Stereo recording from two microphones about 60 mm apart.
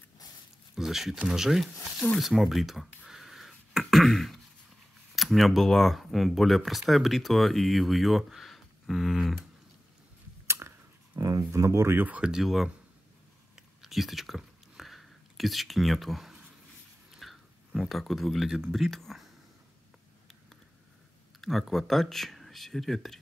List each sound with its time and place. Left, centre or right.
0.7 s speech: centre
2.1 s a sound: centre
5.1 s speech: centre
10.4 s a sound: right
11.1 s speech: right
12.2 s speech: centre
13.6 s a sound: centre
17.8 s speech: centre
21.4 s speech: centre